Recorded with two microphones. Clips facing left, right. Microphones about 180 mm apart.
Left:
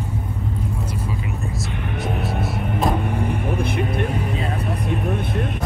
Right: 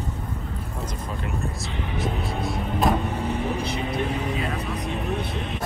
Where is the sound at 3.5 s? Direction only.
55° left (ahead or behind).